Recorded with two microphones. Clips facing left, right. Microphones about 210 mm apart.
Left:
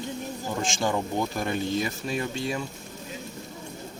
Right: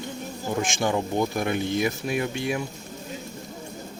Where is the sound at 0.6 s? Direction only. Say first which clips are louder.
Right 2 dB; 20° right (ahead or behind).